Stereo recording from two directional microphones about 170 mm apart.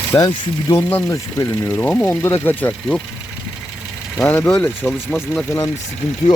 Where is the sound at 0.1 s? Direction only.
25° left (ahead or behind).